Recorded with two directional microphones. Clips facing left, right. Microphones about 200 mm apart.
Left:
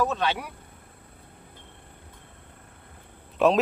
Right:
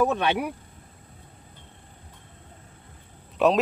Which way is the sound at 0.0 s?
60° right (ahead or behind).